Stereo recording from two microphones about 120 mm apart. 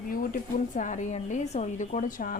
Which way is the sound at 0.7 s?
90° left.